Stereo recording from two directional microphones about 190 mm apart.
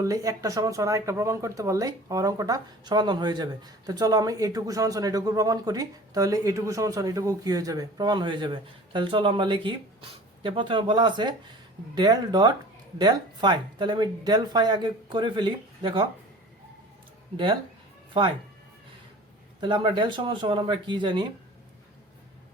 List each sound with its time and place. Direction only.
0.0 s speech: 15° right (ahead or behind)
17.3 s speech: 25° right (ahead or behind)
19.5 s speech: 25° right (ahead or behind)